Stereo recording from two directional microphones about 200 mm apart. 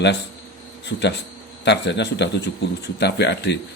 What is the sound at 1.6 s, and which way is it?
A man's voice, 60° left (ahead or behind).